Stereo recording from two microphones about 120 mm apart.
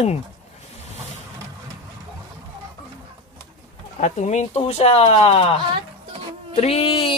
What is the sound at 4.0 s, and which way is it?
A child's voice, 80° left.